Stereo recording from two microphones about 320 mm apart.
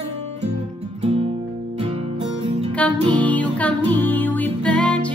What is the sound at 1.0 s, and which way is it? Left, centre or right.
Music, centre.